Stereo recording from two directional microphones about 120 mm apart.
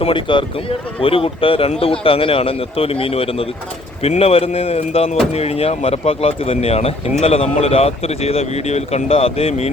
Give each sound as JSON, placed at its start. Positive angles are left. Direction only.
{"t": 0.0, "sound": "a man's voice", "side_deg": 45}